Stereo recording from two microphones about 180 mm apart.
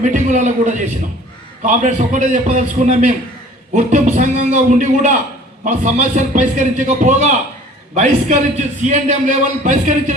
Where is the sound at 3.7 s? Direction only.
45° right (ahead or behind).